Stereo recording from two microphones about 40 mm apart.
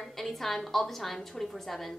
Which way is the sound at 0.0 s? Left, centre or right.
Centre.